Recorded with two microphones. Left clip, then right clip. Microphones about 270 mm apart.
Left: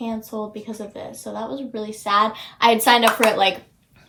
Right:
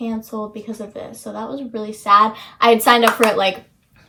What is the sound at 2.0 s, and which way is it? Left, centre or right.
Speech, centre.